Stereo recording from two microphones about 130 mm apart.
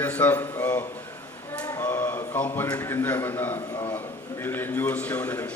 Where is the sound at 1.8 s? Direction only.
15° left (ahead or behind).